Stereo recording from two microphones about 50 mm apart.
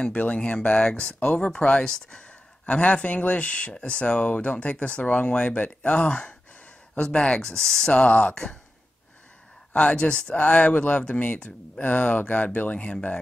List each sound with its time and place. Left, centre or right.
0.0 s speech: left
2.6 s speech: left; by 7.9 s centre
7.9 s speech: left
9.8 s speech: left